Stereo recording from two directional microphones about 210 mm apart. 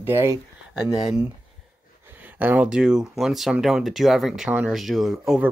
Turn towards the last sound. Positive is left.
turn(degrees=0)  # may be behind; listen again after turning